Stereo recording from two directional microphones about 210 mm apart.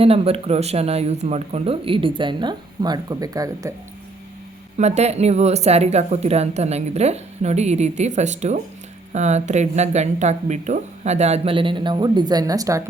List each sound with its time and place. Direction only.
0.0 s speech: 25° right (ahead or behind)
4.8 s a woman's voice: 30° right (ahead or behind); by 12.8 s 15° right (ahead or behind)